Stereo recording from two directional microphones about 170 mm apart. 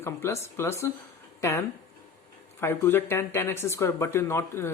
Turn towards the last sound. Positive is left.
turn(degrees=15)  # may be behind; listen again after turning